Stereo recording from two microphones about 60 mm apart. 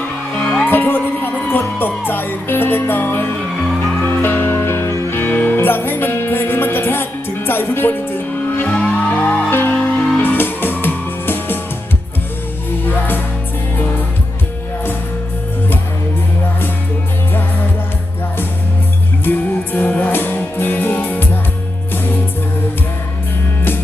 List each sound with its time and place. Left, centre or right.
0.3 s music: left
4.9 s music: left
5.1 s music: left
9.5 s music: left
12.8 s music: left
19.2 s music: left